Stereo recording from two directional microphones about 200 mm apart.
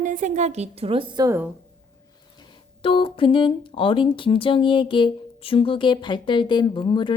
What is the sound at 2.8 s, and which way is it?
Speech, 25° left (ahead or behind).